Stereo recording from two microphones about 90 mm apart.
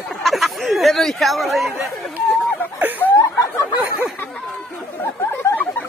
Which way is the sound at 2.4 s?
20° left (ahead or behind).